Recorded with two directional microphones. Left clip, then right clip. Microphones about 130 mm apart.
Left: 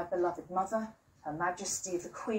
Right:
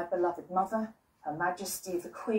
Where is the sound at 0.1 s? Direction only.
5° left (ahead or behind).